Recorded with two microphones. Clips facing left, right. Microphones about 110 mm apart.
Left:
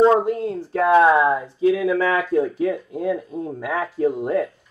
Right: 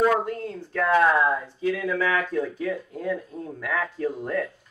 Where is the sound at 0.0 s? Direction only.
25° left (ahead or behind).